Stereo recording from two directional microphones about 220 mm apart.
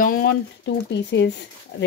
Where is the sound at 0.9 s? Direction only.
50° left (ahead or behind).